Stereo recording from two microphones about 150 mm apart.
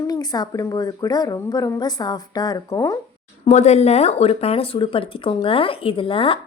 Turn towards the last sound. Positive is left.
turn(degrees=35)  # may be behind; listen again after turning